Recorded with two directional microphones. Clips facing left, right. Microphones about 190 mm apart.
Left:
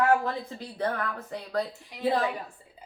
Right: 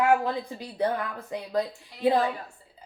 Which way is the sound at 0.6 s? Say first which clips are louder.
Right 3 dB; 15° right (ahead or behind).